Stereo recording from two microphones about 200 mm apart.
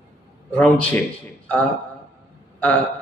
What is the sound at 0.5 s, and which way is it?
Speech, 5° left (ahead or behind).